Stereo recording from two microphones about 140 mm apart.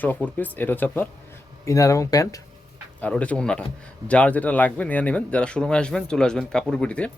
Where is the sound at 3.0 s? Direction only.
10° left (ahead or behind).